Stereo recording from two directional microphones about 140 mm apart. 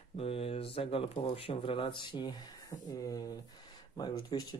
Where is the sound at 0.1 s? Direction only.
45° left (ahead or behind).